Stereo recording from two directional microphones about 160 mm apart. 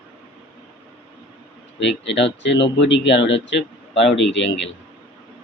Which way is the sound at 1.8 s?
90° left.